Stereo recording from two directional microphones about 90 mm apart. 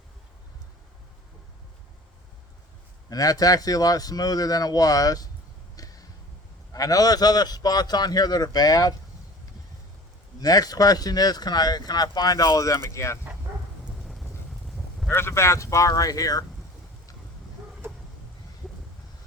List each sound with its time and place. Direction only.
3.1 s speech: 45° left (ahead or behind)
5.7 s a sound: 40° left (ahead or behind)
6.7 s speech: 40° left (ahead or behind)
10.4 s speech: 45° left (ahead or behind)
14.0 s clip-clop: centre (ahead or behind)
15.1 s speech: 30° left (ahead or behind)